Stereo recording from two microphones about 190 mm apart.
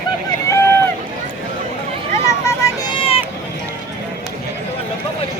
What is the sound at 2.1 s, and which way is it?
Vehicle, 15° left (ahead or behind).